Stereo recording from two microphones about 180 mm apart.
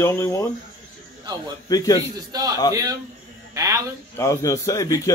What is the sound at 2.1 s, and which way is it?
Speech, 20° right (ahead or behind).